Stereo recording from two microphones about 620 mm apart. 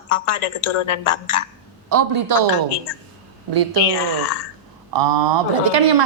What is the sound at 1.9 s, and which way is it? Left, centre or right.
Speech, right.